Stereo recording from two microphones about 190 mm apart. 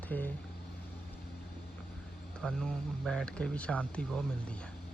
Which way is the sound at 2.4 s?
5° left (ahead or behind).